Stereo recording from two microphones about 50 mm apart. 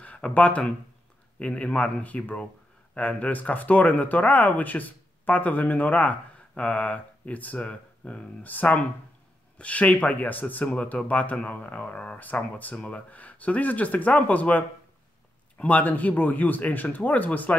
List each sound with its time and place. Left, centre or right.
0.0 s speech: left
8.5 s speech: left
12.2 s speech: left
12.7 s speech: left